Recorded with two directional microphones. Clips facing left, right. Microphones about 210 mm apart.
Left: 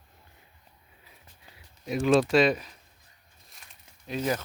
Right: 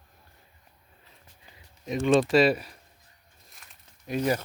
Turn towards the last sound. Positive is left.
turn(degrees=-10)  # may be behind; listen again after turning